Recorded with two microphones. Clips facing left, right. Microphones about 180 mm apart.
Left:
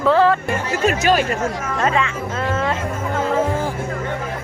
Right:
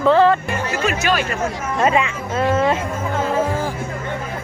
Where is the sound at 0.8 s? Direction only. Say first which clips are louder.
Left 4 dB; 40° left (ahead or behind).